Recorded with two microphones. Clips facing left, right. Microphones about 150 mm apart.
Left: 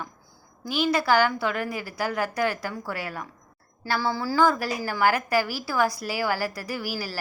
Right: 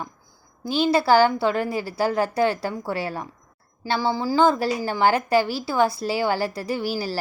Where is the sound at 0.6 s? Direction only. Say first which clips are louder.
Right 4 dB; 30° right (ahead or behind).